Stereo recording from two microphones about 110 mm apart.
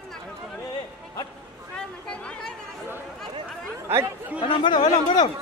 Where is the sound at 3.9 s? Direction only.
25° right (ahead or behind).